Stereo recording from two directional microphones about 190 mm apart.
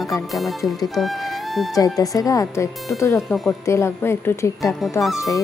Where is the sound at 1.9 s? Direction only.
20° left (ahead or behind).